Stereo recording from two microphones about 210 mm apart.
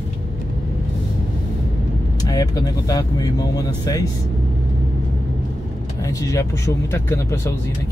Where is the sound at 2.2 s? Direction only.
15° left (ahead or behind).